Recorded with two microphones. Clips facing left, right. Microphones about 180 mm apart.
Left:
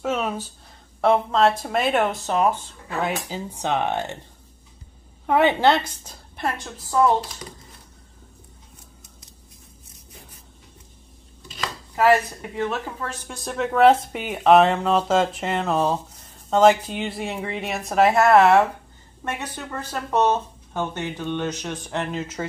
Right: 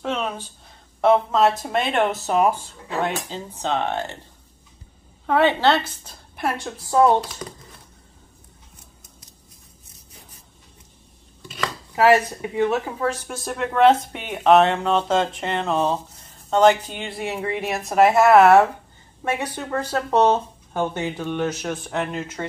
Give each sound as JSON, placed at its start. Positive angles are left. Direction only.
{"t": 0.0, "sound": "a sound", "side_deg": 10}
{"t": 1.0, "sound": "speech", "side_deg": -5}
{"t": 3.0, "sound": "speech", "side_deg": 10}
{"t": 5.2, "sound": "speech", "side_deg": 15}
{"t": 12.1, "sound": "speech", "side_deg": -15}
{"t": 13.0, "sound": "speech", "side_deg": -5}